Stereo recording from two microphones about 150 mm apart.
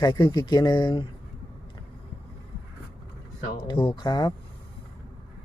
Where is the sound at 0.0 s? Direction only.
30° left (ahead or behind).